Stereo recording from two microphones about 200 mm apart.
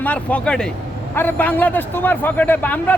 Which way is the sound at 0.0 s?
5° left (ahead or behind).